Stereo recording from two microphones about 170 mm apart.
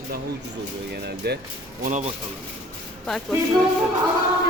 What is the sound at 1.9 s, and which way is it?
Speech, 45° right (ahead or behind).